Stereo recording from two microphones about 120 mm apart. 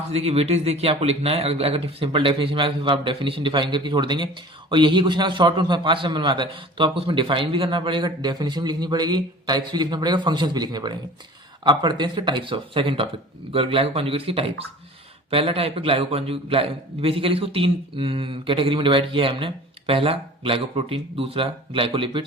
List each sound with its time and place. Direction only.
0.1 s a man's voice: 60° right (ahead or behind)